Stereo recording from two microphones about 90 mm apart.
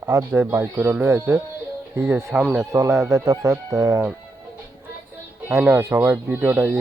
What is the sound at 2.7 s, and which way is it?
Speech, 35° right (ahead or behind).